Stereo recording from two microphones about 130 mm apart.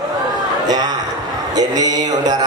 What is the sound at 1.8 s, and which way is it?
Mantra, 30° right (ahead or behind).